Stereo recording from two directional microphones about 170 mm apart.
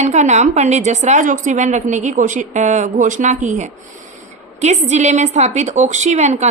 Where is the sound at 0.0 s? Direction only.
45° right (ahead or behind).